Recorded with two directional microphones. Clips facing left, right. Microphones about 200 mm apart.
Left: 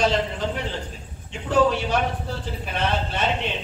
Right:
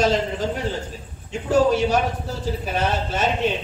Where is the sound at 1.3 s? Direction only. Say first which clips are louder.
Right 2 dB; 45° right (ahead or behind).